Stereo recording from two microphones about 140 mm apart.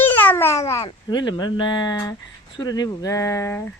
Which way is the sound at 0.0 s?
15° left (ahead or behind).